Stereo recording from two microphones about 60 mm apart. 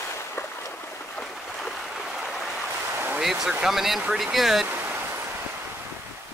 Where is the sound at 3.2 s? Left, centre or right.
Centre.